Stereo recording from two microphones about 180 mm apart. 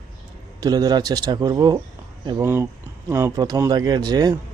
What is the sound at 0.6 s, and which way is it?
Speech, 20° right (ahead or behind).